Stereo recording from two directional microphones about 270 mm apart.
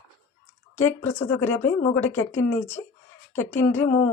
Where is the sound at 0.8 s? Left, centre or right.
Centre.